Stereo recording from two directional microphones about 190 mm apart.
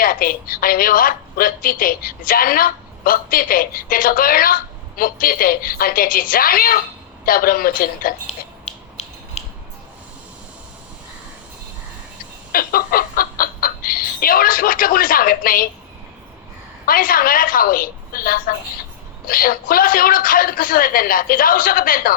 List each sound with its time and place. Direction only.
0.0 s a woman's voice: 50° left (ahead or behind)
8.6 s music: 35° left (ahead or behind)
12.5 s speech: 50° left (ahead or behind)
16.8 s a woman's voice: 50° left (ahead or behind)